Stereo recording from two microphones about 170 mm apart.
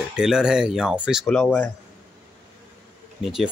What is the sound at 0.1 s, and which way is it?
Speech, 5° right (ahead or behind).